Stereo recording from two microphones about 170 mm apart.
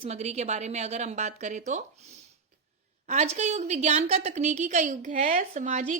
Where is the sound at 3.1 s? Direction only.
40° right (ahead or behind).